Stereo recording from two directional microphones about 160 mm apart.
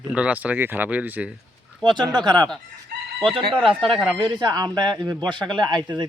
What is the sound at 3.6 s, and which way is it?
Speech, centre (ahead or behind).